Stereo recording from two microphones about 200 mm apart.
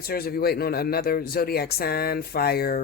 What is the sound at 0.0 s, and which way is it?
Speech, 50° left (ahead or behind).